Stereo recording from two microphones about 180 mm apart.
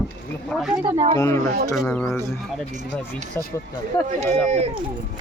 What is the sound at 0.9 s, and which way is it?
Speech, 35° right (ahead or behind).